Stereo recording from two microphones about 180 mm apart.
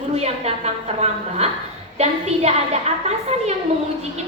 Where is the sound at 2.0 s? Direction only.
35° right (ahead or behind).